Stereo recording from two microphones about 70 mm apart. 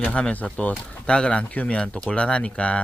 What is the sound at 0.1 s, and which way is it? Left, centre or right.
Speech, centre.